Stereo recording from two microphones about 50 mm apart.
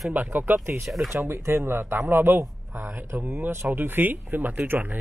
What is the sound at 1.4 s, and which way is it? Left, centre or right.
A man's voice, right.